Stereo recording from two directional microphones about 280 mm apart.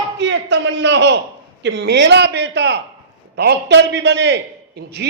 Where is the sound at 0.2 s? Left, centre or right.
Right.